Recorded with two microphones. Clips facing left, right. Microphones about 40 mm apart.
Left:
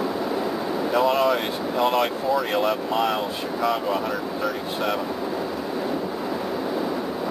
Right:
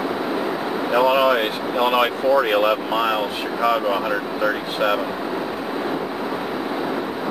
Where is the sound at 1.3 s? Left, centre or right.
Right.